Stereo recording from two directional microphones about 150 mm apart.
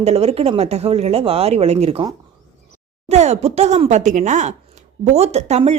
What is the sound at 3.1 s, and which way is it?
Speech, 45° right (ahead or behind).